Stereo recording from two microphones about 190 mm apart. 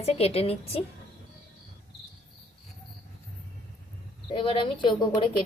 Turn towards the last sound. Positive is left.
turn(degrees=25)  # may be behind; listen again after turning